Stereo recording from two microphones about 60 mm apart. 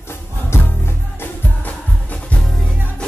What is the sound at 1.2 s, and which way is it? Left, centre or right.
Music, left.